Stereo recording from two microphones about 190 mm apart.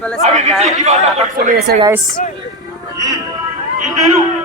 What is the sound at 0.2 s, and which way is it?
A man's voice, 35° right (ahead or behind).